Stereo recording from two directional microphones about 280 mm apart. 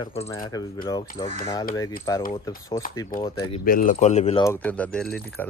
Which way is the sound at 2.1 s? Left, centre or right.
Centre.